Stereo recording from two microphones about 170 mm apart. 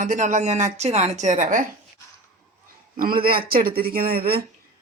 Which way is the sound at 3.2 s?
60° right (ahead or behind).